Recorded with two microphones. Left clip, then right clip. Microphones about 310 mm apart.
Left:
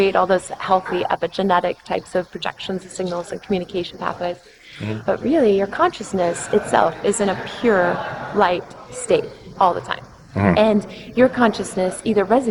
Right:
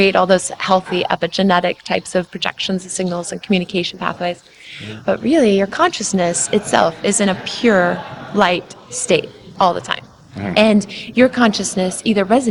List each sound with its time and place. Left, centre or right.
0.0 s a woman's voice: right